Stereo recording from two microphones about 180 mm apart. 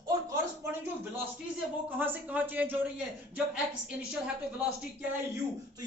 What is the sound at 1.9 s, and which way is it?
A woman's voice, 10° right (ahead or behind).